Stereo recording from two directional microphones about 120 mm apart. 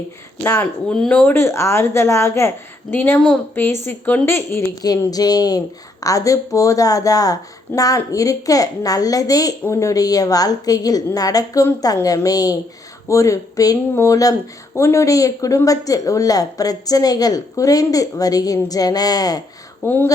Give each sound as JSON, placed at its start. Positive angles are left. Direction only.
{"t": 0.4, "sound": "a woman's voice", "side_deg": 20}
{"t": 0.9, "sound": "a woman's voice", "side_deg": 10}
{"t": 4.7, "sound": "a woman's voice", "side_deg": 30}
{"t": 19.8, "sound": "speech", "side_deg": 20}